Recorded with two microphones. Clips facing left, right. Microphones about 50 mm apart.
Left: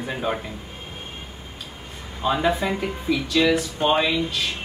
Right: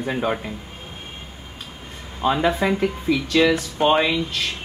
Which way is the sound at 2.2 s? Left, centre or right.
Centre.